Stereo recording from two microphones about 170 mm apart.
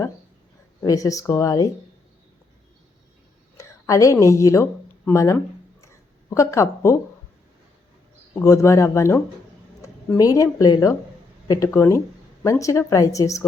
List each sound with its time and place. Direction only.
0.8 s a woman's voice: 20° left (ahead or behind)
3.6 s speech: 20° left (ahead or behind)
8.4 s a woman's voice: 15° left (ahead or behind)